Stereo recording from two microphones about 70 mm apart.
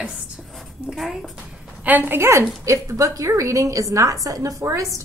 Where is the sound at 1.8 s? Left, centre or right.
Right.